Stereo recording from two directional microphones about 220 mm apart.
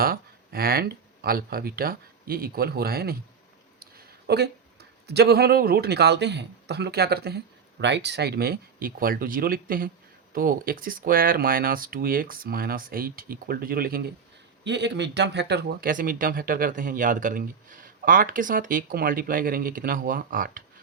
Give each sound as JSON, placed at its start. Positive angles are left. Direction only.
{"t": 0.0, "sound": "speech", "side_deg": -45}
{"t": 3.8, "sound": "a sound", "side_deg": -45}
{"t": 5.0, "sound": "a man's voice", "side_deg": -45}